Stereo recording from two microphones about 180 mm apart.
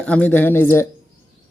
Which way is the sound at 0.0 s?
10° left (ahead or behind).